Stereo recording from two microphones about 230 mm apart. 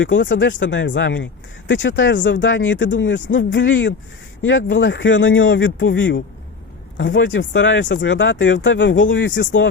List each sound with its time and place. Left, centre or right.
0.0 s speech: left